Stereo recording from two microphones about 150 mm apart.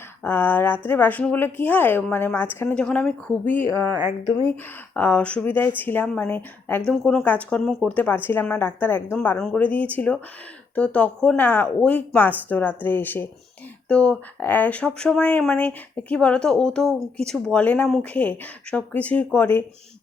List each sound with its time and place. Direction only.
0.2 s speech: 10° left (ahead or behind)
4.9 s speech: 10° left (ahead or behind)